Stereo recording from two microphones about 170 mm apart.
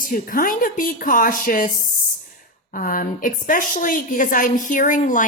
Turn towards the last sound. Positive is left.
turn(degrees=50)  # may be behind; listen again after turning